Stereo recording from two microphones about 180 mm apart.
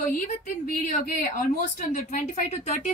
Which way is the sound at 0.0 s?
50° left (ahead or behind).